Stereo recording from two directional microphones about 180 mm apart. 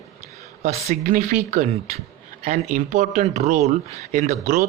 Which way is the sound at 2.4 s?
35° right (ahead or behind).